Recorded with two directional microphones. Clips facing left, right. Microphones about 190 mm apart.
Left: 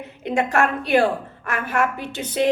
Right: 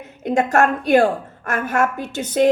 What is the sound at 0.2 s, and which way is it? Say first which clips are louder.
A woman's voice: right 3 dB; 45° right (ahead or behind).